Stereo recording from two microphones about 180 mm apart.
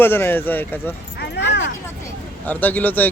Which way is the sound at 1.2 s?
75° left (ahead or behind).